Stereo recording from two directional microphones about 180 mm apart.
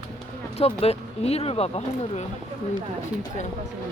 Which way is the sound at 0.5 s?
35° left (ahead or behind).